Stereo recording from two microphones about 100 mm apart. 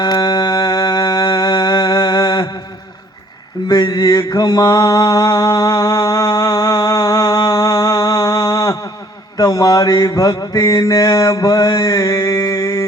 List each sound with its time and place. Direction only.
0.0 s music: 40° left (ahead or behind)
3.7 s mantra: 40° left (ahead or behind)